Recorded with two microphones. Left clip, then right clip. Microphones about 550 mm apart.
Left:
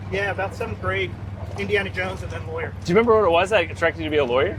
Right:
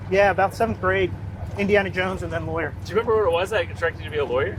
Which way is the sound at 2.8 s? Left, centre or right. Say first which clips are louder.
Left 5 dB; left.